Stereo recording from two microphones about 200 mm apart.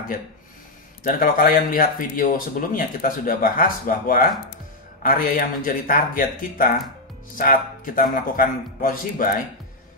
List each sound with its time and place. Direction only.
1.0 s speech: 45° left (ahead or behind)